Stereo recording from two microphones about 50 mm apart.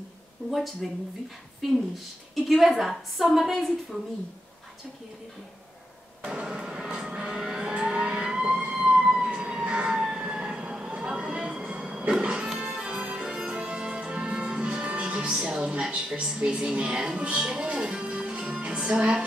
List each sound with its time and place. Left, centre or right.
0.8 s a woman's voice: centre
2.3 s a woman's voice: centre
6.2 s vehicle: centre
12.2 s music: right
15.8 s speech: centre